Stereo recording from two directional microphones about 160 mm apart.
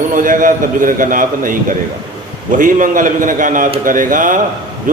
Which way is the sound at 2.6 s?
55° right (ahead or behind).